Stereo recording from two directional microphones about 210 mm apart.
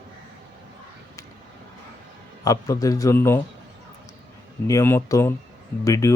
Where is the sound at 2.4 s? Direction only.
15° left (ahead or behind).